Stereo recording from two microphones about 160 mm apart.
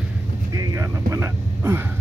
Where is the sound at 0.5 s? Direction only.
20° right (ahead or behind).